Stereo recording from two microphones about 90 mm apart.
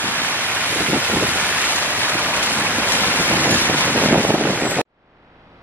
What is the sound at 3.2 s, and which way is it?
Vehicle, 20° right (ahead or behind).